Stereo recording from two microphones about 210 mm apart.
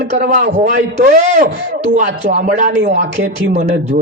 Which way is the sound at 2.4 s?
35° right (ahead or behind).